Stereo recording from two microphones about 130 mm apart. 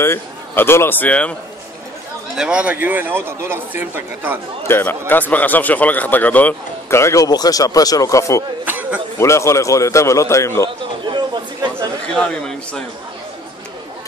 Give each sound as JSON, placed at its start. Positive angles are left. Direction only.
{"t": 0.0, "sound": "speech", "side_deg": 20}
{"t": 2.3, "sound": "speech", "side_deg": -5}
{"t": 4.6, "sound": "speech", "side_deg": 15}
{"t": 8.6, "sound": "a sound", "side_deg": -15}
{"t": 9.2, "sound": "a man's voice", "side_deg": 20}
{"t": 12.2, "sound": "speech", "side_deg": 5}